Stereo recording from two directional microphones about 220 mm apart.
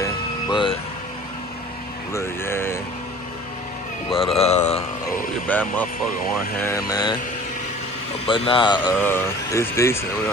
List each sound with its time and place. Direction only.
0.0 s a sound: 20° left (ahead or behind)
2.1 s speech: 10° left (ahead or behind)
4.1 s mantra: 25° left (ahead or behind)
5.5 s speech: 5° left (ahead or behind)
6.9 s mantra: 20° left (ahead or behind)
8.3 s mantra: 20° left (ahead or behind)
9.0 s speech: 10° left (ahead or behind)